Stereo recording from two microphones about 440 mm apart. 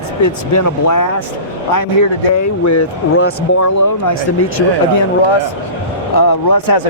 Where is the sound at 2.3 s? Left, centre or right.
Left.